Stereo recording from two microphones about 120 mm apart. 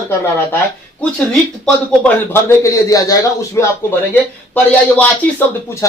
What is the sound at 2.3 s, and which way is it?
Speech, 25° left (ahead or behind).